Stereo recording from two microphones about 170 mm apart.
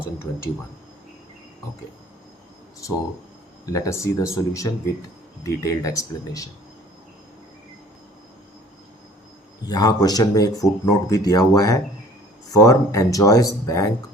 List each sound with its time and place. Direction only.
3.7 s speech: 20° left (ahead or behind)
9.6 s speech: 20° left (ahead or behind)